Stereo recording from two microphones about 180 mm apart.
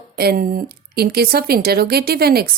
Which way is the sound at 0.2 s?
55° right (ahead or behind).